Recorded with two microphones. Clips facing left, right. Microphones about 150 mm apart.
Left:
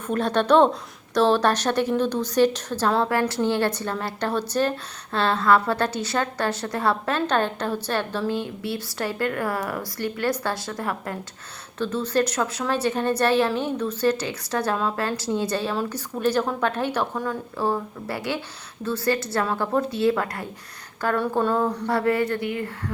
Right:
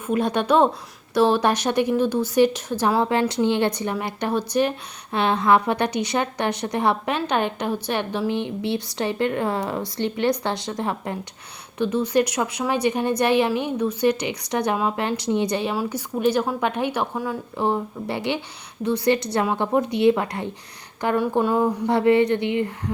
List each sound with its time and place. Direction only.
0.1 s a woman's voice: 10° right (ahead or behind)